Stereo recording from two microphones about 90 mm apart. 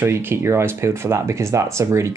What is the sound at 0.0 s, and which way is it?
Speech, 25° right (ahead or behind).